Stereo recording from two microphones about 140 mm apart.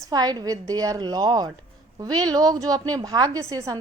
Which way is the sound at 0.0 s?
30° right (ahead or behind).